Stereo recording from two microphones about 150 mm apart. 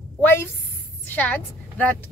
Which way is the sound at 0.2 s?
15° left (ahead or behind).